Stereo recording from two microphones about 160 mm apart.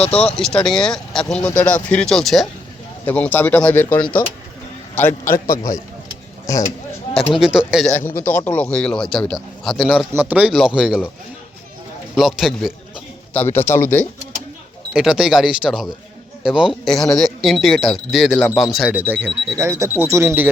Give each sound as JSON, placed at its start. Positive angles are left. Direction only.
{"t": 0.0, "sound": "speech", "side_deg": 40}
{"t": 0.3, "sound": "speech", "side_deg": 5}
{"t": 5.3, "sound": "a man's voice", "side_deg": 20}
{"t": 7.3, "sound": "speech", "side_deg": -5}
{"t": 7.9, "sound": "speech", "side_deg": 15}
{"t": 10.1, "sound": "speech", "side_deg": -10}
{"t": 12.1, "sound": "speech", "side_deg": 0}
{"t": 13.5, "sound": "speech", "side_deg": 15}
{"t": 14.9, "sound": "speech", "side_deg": -5}
{"t": 19.0, "sound": "speech", "side_deg": -10}